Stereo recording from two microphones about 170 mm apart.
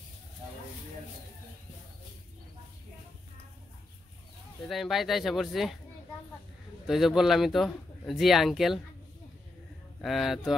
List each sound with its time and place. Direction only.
4.6 s a man's voice: centre (ahead or behind)
6.9 s a man's voice: centre (ahead or behind)
10.0 s a man's voice: centre (ahead or behind)